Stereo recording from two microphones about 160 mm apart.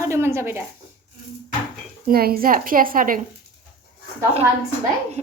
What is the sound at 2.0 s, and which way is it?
A woman's voice, 70° right (ahead or behind).